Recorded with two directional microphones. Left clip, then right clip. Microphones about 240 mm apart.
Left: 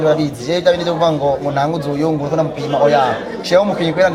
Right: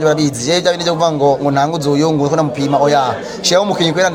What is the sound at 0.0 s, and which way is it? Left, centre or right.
A man's voice, right.